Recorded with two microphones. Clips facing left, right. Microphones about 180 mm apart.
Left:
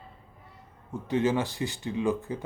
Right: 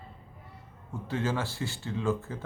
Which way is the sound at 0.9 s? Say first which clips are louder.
Left 5 dB; 20° left (ahead or behind).